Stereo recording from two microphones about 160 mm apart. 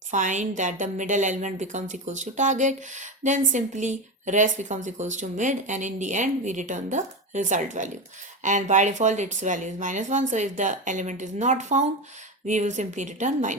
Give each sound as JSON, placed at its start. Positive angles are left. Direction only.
{"t": 0.1, "sound": "a woman's voice", "side_deg": -50}